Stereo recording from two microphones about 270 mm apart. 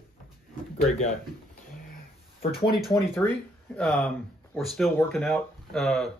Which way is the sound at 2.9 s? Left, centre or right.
Centre.